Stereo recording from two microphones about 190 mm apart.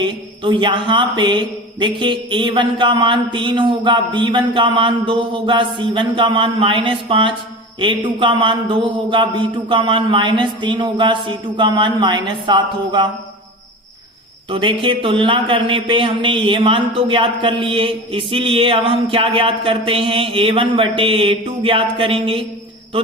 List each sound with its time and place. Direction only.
0.0 s a man's voice: 25° right (ahead or behind)
14.5 s a man's voice: 25° right (ahead or behind)